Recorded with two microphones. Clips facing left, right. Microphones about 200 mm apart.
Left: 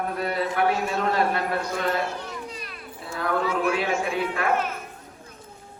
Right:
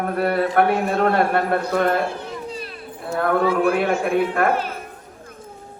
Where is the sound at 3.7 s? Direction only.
55° right (ahead or behind).